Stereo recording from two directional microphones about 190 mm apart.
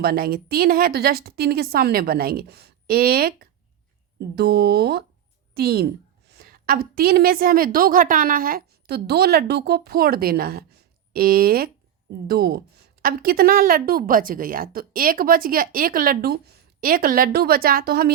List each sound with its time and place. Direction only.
0.0 s a woman's voice: 50° right (ahead or behind)